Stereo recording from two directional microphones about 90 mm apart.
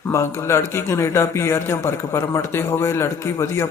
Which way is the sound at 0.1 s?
30° left (ahead or behind).